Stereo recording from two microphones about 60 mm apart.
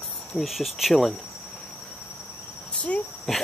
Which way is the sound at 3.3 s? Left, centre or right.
Centre.